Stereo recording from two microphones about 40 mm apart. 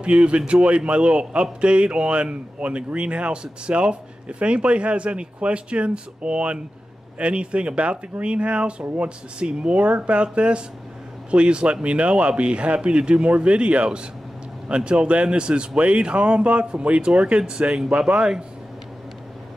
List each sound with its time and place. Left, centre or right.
0.0 s a man's voice: right